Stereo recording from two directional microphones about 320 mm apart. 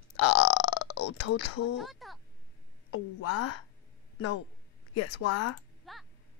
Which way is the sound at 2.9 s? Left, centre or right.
Left.